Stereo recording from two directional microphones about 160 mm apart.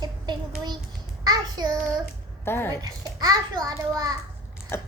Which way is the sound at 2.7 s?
25° right (ahead or behind).